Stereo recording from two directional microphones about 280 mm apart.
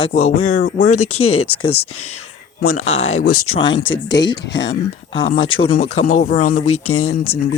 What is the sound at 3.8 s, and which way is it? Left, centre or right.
Speech, left.